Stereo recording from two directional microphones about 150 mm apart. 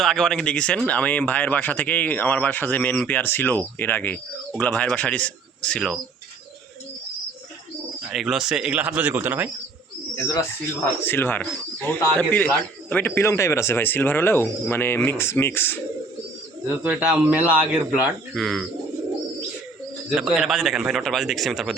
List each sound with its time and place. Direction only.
0.0 s speech: 5° left (ahead or behind)
8.1 s speech: centre (ahead or behind)
11.0 s speech: 15° left (ahead or behind)
16.7 s speech: 10° right (ahead or behind)
18.3 s speech: 5° left (ahead or behind)
20.1 s speech: 5° right (ahead or behind)